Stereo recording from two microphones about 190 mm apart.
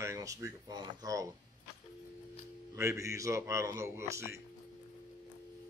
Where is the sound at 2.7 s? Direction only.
15° right (ahead or behind).